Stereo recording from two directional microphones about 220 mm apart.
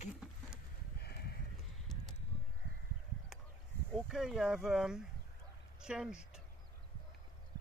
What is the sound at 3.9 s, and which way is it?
Speech, centre (ahead or behind).